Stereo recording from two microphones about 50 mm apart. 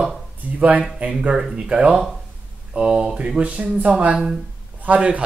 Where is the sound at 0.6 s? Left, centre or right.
Right.